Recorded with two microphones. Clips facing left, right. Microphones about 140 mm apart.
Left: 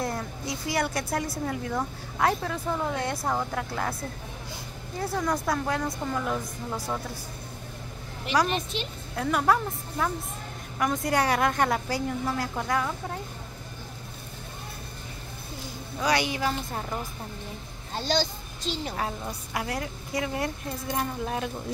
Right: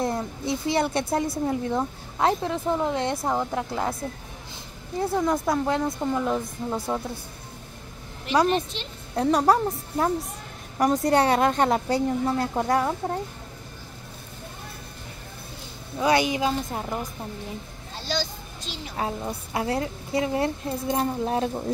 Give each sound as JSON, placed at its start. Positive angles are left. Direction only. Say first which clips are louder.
{"t": 0.0, "sound": "a woman's voice", "louder": "right 4 dB", "side_deg": -20}
{"t": 5.0, "sound": "a woman's voice", "louder": "right 4 dB", "side_deg": -20}
{"t": 8.7, "sound": "a woman's voice", "louder": "left 3 dB", "side_deg": 10}
{"t": 9.1, "sound": "a woman's voice", "louder": "right 4 dB", "side_deg": -30}
{"t": 16.0, "sound": "a woman's voice", "louder": "right 4 dB", "side_deg": -25}
{"t": 18.9, "sound": "a woman's voice", "louder": "right 3 dB", "side_deg": -25}